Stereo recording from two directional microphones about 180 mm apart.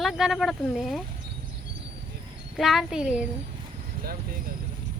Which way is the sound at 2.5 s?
Centre (ahead or behind).